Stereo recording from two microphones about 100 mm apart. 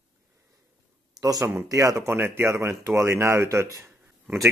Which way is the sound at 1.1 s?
35° right (ahead or behind).